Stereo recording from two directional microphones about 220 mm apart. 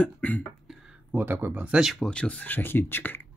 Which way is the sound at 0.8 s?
10° right (ahead or behind).